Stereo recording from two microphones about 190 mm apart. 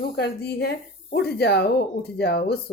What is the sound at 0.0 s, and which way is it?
Speech, 55° left (ahead or behind).